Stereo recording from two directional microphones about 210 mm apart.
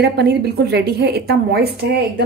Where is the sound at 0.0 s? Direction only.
50° right (ahead or behind).